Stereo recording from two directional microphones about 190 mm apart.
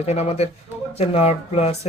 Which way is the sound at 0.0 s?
35° left (ahead or behind).